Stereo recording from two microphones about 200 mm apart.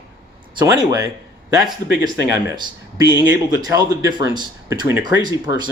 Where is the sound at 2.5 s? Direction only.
20° right (ahead or behind).